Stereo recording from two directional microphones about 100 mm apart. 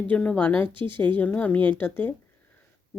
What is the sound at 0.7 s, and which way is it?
Speech, 55° right (ahead or behind).